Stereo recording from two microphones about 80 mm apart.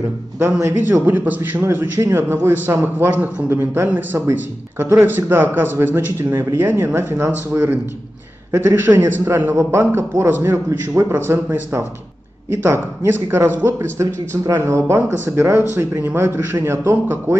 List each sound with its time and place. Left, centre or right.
0.4 s speech: right
1.0 s a man's voice: right